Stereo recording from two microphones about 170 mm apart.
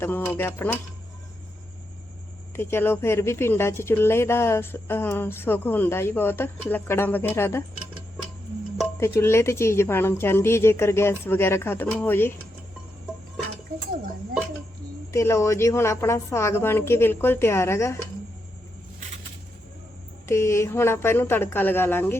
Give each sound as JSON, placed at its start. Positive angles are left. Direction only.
{"t": 0.0, "sound": "speech", "side_deg": 10}
{"t": 2.6, "sound": "speech", "side_deg": 15}
{"t": 9.0, "sound": "speech", "side_deg": 15}
{"t": 15.1, "sound": "speech", "side_deg": 15}
{"t": 20.2, "sound": "speech", "side_deg": 15}